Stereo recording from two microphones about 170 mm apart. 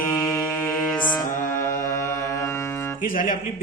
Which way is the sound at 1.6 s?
15° left (ahead or behind).